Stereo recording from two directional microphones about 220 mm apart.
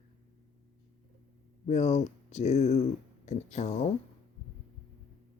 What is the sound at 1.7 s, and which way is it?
Speech, 30° left (ahead or behind).